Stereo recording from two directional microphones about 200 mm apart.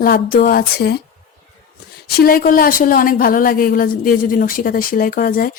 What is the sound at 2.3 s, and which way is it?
A woman's voice, 45° left (ahead or behind).